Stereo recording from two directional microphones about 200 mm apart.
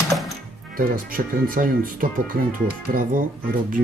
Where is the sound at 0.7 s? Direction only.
45° right (ahead or behind).